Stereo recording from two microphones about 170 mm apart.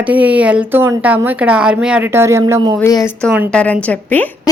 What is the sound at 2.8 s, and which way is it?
Speech, 20° left (ahead or behind).